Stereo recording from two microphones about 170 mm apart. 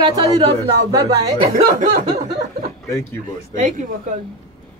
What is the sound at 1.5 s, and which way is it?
Speech, 55° right (ahead or behind).